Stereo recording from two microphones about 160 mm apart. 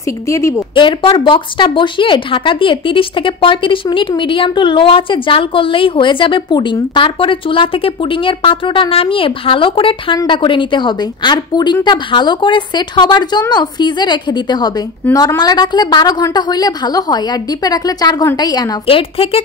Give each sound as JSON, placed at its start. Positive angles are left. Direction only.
{"t": 0.3, "sound": "a woman's voice", "side_deg": 20}
{"t": 0.7, "sound": "a woman's voice", "side_deg": 30}